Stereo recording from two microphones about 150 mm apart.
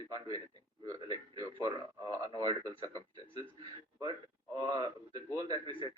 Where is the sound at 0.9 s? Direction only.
30° right (ahead or behind).